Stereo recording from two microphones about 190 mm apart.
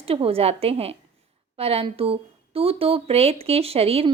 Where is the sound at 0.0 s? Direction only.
30° right (ahead or behind).